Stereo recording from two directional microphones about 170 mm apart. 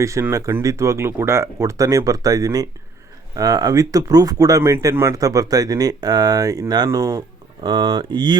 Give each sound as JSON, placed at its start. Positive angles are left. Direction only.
{"t": 0.0, "sound": "speech", "side_deg": -15}